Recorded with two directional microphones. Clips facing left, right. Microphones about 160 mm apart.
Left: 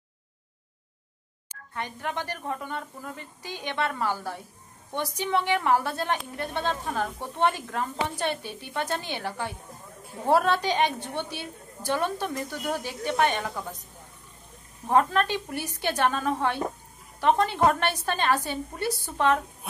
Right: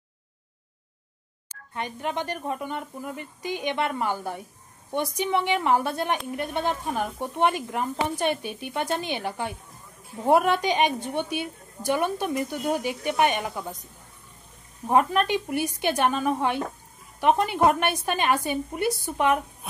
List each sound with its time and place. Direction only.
1.7 s a woman's voice: 20° right (ahead or behind)
14.9 s a woman's voice: 15° right (ahead or behind)